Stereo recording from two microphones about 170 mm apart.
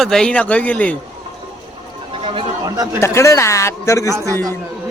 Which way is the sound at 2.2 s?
30° right (ahead or behind).